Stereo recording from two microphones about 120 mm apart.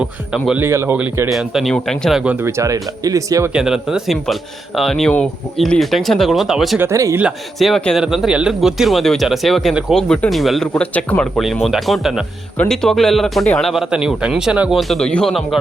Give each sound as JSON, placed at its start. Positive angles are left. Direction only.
{"t": 0.6, "sound": "speech", "side_deg": -20}
{"t": 1.3, "sound": "speech", "side_deg": 0}
{"t": 2.3, "sound": "speech", "side_deg": -20}
{"t": 3.5, "sound": "speech", "side_deg": -5}
{"t": 6.7, "sound": "speech", "side_deg": -25}
{"t": 7.2, "sound": "speech", "side_deg": -5}
{"t": 8.0, "sound": "speech", "side_deg": -5}
{"t": 11.6, "sound": "speech", "side_deg": 0}
{"t": 14.8, "sound": "speech", "side_deg": 0}